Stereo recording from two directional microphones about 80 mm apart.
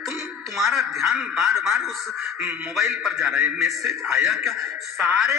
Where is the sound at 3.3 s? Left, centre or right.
Right.